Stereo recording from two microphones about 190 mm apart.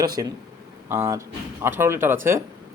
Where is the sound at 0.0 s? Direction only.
20° right (ahead or behind).